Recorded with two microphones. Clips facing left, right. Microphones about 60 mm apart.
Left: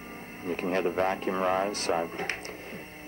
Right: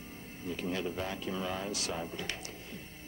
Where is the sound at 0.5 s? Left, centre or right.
Left.